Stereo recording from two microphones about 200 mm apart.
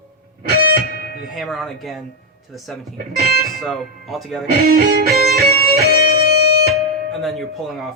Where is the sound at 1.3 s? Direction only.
Centre (ahead or behind).